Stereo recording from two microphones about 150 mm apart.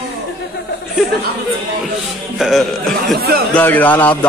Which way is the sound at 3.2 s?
90° right.